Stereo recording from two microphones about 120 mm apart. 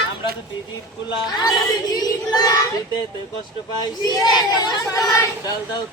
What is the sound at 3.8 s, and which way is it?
Speech, 35° left (ahead or behind).